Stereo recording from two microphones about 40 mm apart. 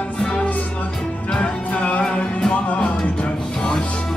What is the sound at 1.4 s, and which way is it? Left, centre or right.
Music, left.